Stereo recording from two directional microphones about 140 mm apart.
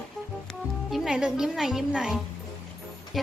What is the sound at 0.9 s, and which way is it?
Speech, 5° right (ahead or behind).